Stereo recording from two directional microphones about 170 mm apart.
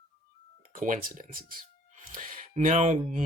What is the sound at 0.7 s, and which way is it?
Speech, 50° right (ahead or behind).